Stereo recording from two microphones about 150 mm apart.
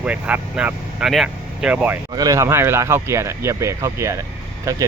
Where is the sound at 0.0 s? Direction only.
10° right (ahead or behind).